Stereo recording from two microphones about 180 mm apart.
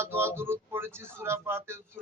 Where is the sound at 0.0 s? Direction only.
15° right (ahead or behind).